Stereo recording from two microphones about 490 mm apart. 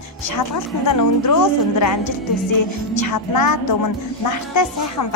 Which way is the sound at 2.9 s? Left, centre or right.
Left.